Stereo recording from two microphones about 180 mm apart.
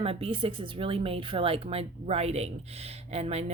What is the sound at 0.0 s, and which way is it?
A woman's voice, 35° right (ahead or behind).